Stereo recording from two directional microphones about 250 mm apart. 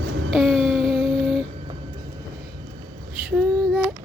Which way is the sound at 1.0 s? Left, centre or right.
Centre.